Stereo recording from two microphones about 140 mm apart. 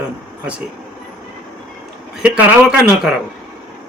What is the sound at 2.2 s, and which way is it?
Speech, 10° right (ahead or behind).